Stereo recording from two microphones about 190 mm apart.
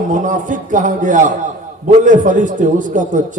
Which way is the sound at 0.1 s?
40° right (ahead or behind).